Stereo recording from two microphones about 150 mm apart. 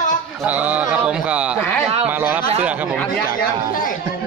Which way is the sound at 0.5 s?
10° right (ahead or behind).